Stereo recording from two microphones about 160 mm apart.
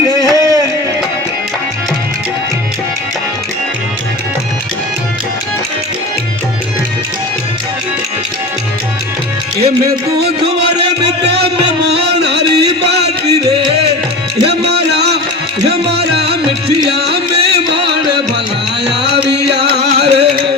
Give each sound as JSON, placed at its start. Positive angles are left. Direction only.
{"t": 0.2, "sound": "a sound", "side_deg": -20}
{"t": 9.6, "sound": "music", "side_deg": -40}
{"t": 11.2, "sound": "music", "side_deg": -90}
{"t": 14.4, "sound": "a sound", "side_deg": -90}
{"t": 15.6, "sound": "music", "side_deg": -90}
{"t": 19.0, "sound": "music", "side_deg": -90}